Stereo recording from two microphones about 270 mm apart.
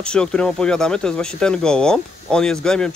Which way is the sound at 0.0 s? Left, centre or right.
Centre.